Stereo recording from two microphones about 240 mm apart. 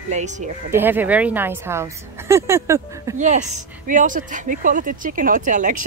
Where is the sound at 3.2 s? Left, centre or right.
Right.